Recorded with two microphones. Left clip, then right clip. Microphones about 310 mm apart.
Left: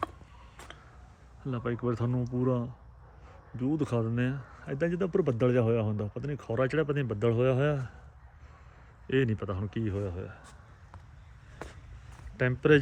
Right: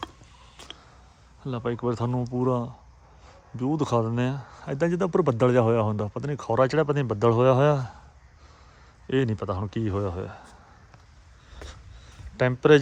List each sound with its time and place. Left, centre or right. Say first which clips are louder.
0.5 s a sound: right 5 dB; centre
1.5 s speech: right 5 dB; centre
9.0 s speech: right 3 dB; centre
12.4 s speech: right 6 dB; centre